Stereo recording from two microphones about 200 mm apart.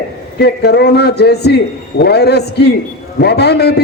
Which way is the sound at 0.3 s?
55° left (ahead or behind).